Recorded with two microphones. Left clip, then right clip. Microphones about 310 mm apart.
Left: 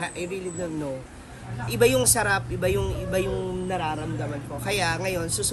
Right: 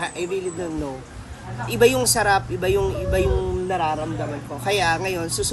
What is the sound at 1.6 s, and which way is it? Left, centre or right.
Speech, centre.